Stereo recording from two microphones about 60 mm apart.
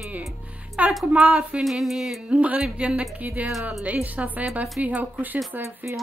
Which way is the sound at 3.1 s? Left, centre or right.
Right.